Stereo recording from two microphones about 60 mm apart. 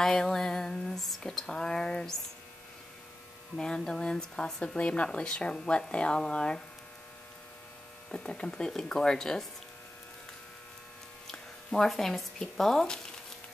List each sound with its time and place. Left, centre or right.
0.0 s speech: centre
3.5 s speech: centre
8.1 s speech: centre
11.2 s speech: centre